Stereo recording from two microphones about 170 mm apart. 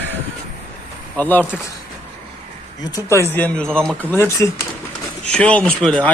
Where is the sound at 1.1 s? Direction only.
10° left (ahead or behind).